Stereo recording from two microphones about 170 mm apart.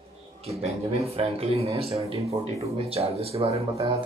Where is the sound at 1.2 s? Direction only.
35° right (ahead or behind).